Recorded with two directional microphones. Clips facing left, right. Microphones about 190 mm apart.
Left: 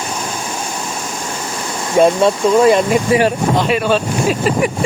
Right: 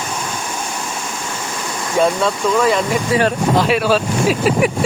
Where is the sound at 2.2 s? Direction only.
20° left (ahead or behind).